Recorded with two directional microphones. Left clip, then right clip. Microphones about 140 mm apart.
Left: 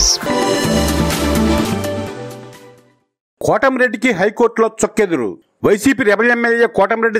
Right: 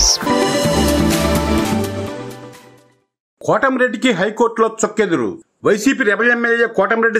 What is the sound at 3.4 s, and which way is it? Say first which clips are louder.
Speech: left 1 dB; 45° left (ahead or behind).